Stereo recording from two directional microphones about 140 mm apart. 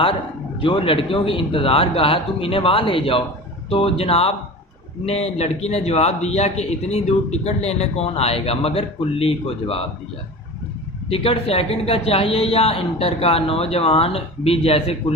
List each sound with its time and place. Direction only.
0.6 s a man's voice: 40° left (ahead or behind)
11.1 s a man's voice: 40° left (ahead or behind)